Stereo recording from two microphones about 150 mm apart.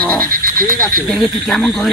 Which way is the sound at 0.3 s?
70° right (ahead or behind).